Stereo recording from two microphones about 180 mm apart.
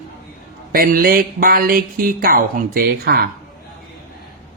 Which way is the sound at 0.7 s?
55° right (ahead or behind).